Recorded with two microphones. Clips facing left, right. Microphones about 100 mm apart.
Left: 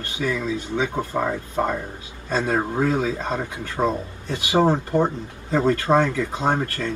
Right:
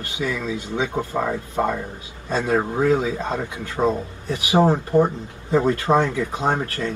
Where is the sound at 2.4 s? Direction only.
20° right (ahead or behind).